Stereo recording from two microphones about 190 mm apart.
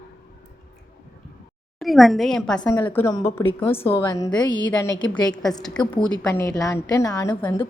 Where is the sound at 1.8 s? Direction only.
Centre (ahead or behind); by 4.6 s 25° left (ahead or behind).